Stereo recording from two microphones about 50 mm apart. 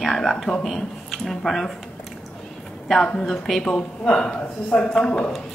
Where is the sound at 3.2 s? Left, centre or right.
Centre.